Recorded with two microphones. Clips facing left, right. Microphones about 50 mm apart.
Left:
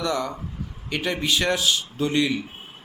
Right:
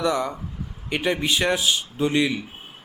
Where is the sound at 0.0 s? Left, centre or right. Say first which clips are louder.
Right 2 dB; centre.